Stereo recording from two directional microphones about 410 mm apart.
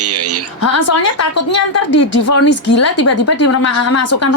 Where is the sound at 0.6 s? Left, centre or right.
Left.